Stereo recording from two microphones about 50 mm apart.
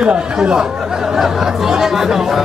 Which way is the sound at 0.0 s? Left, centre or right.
Centre.